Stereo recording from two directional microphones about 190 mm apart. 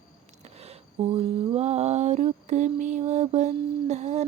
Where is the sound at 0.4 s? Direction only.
35° right (ahead or behind).